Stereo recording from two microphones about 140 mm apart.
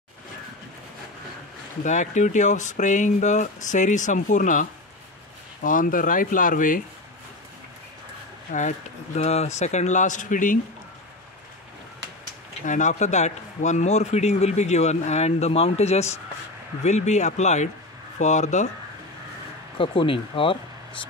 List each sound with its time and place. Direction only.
1.9 s speech: 60° left (ahead or behind)
8.5 s speech: 65° left (ahead or behind)
12.6 s speech: 60° left (ahead or behind)
19.8 s speech: 40° left (ahead or behind)